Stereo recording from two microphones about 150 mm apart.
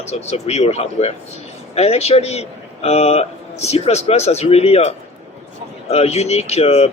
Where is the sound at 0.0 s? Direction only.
45° left (ahead or behind).